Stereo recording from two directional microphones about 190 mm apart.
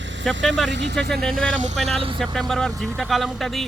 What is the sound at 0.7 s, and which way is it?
Speech, 65° right (ahead or behind).